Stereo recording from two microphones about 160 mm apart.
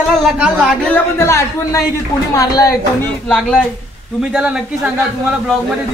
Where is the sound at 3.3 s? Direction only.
Centre (ahead or behind).